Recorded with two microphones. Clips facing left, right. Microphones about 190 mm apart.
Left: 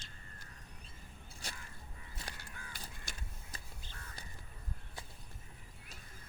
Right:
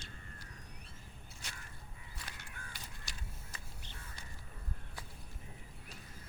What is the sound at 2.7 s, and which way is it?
Crow, 50° left (ahead or behind).